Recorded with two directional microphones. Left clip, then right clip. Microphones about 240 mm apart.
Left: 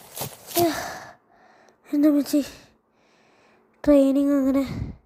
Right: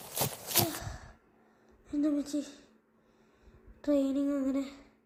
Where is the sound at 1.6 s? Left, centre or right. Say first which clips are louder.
Left 12 dB; left.